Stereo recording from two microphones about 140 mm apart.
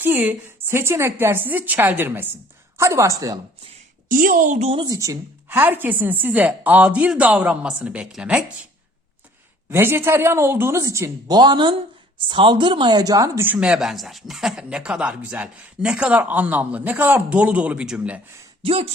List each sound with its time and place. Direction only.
0.0 s a woman's voice: 15° right (ahead or behind)
4.1 s a woman's voice: 75° right (ahead or behind)
4.9 s speech: 25° right (ahead or behind); by 8.4 s 10° right (ahead or behind)
9.6 s speech: 15° right (ahead or behind)
18.6 s speech: 45° right (ahead or behind)